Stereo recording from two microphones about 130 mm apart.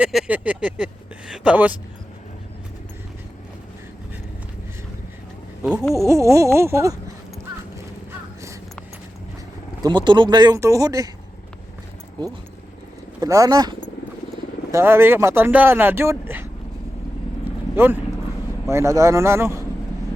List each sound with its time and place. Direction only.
0.0 s speech: 5° right (ahead or behind)
6.1 s a man's voice: 25° right (ahead or behind)
9.8 s speech: 35° right (ahead or behind)
13.1 s a man's voice: 25° right (ahead or behind)
17.4 s vehicle: 15° right (ahead or behind)
18.7 s a man's voice: 20° right (ahead or behind)